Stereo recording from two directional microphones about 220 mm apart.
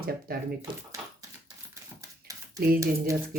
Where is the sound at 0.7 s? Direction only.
20° right (ahead or behind).